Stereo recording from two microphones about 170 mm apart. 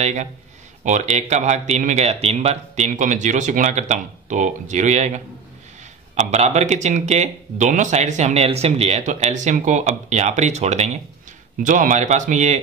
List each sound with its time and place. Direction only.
0.0 s speech: 45° right (ahead or behind)